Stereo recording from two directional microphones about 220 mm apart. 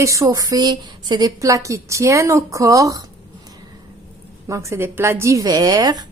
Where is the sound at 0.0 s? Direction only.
15° right (ahead or behind).